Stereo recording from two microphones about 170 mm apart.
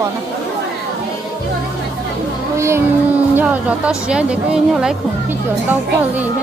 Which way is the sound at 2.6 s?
15° right (ahead or behind).